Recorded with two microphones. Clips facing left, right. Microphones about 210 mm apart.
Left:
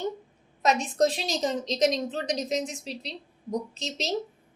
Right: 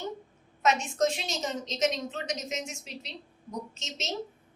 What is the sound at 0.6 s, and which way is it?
A woman's voice, 35° left (ahead or behind).